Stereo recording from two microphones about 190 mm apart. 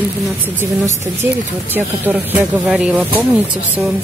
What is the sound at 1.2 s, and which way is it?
A woman's voice, 10° right (ahead or behind).